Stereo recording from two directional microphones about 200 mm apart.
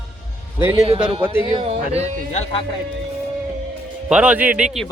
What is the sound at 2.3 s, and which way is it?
Speech, 35° left (ahead or behind).